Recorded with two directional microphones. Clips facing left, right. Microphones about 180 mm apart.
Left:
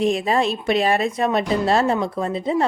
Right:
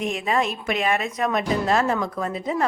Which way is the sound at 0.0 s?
35° left (ahead or behind).